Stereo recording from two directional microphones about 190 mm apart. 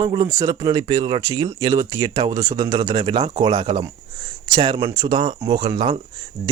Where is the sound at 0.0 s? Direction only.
20° right (ahead or behind).